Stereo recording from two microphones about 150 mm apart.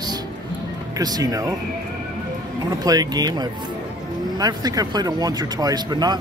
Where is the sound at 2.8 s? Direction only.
25° right (ahead or behind).